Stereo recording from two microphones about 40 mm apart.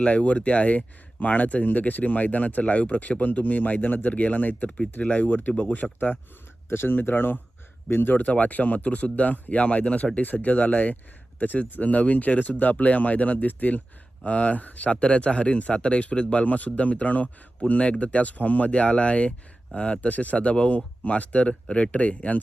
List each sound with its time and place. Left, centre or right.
0.0 s speech: left
6.7 s speech: left
8.1 s speech: left
14.3 s speech: left